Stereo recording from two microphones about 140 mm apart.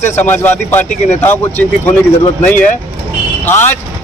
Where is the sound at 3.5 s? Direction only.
15° left (ahead or behind).